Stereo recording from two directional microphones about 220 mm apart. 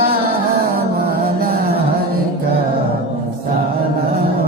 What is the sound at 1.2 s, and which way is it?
Music, 45° right (ahead or behind).